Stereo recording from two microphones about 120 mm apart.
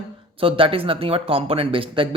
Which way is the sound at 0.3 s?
50° right (ahead or behind).